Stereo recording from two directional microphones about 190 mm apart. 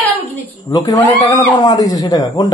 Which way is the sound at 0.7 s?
20° left (ahead or behind).